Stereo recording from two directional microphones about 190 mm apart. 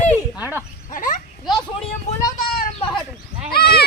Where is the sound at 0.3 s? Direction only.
10° right (ahead or behind).